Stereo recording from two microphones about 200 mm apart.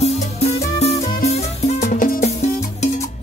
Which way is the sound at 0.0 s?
30° left (ahead or behind).